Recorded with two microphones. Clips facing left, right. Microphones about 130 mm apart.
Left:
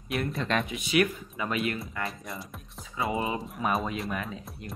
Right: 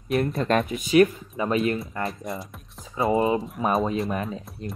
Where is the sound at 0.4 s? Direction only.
50° right (ahead or behind).